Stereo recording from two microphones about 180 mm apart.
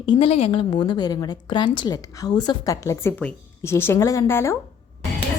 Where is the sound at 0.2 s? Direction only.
35° left (ahead or behind); by 4.5 s 15° left (ahead or behind).